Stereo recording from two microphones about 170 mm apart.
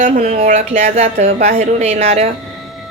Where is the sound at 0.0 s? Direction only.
45° right (ahead or behind).